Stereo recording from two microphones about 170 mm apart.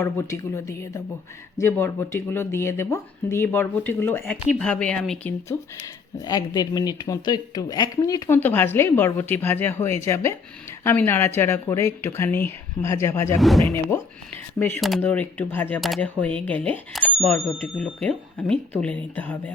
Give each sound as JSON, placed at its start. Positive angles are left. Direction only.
{"t": 0.0, "sound": "speech", "side_deg": 15}
{"t": 5.5, "sound": "speech", "side_deg": 20}
{"t": 13.4, "sound": "speech", "side_deg": 0}
{"t": 14.8, "sound": "speech", "side_deg": 0}